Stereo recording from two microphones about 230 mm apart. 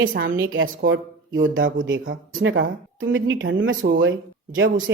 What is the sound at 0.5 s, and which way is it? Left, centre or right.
Speech, right.